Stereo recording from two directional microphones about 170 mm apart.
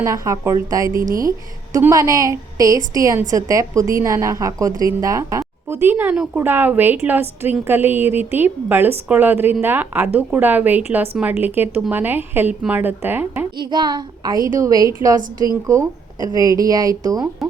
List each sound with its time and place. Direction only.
0.0 s a woman's voice: 20° right (ahead or behind)
0.9 s a woman's voice: 55° right (ahead or behind)
1.7 s a woman's voice: 20° right (ahead or behind)
13.6 s a woman's voice: 25° right (ahead or behind)